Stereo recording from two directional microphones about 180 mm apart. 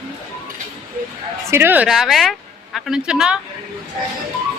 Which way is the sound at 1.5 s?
10° right (ahead or behind).